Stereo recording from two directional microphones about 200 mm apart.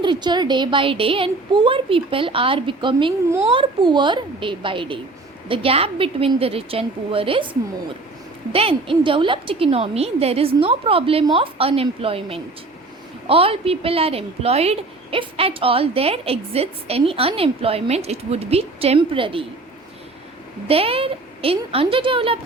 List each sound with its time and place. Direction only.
0.0 s a woman's voice: 25° right (ahead or behind)
8.5 s a woman's voice: 25° right (ahead or behind)
20.7 s a woman's voice: 30° right (ahead or behind)